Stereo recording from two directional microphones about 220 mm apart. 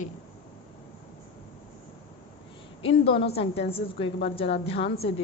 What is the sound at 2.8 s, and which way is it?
A woman's voice, 25° left (ahead or behind).